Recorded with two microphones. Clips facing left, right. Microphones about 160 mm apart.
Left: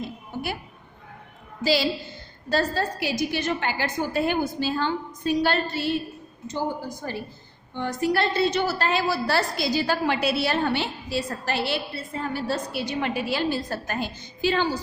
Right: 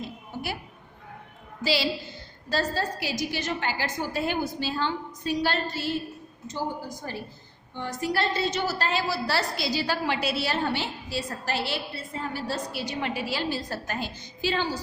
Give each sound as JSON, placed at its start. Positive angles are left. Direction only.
{"t": 0.3, "sound": "music", "side_deg": 55}
{"t": 1.6, "sound": "a woman's voice", "side_deg": 45}
{"t": 2.5, "sound": "a woman's voice", "side_deg": 55}
{"t": 7.0, "sound": "a woman's voice", "side_deg": 65}